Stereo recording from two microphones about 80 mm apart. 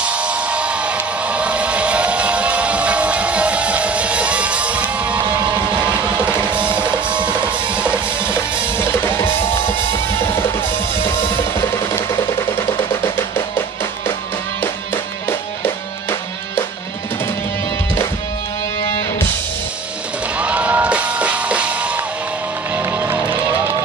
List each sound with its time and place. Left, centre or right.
0.0 s music: centre
9.0 s music: left
15.2 s music: left
20.3 s music: centre
22.8 s music: right